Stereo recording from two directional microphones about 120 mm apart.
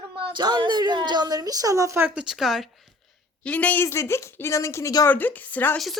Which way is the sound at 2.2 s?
5° right (ahead or behind).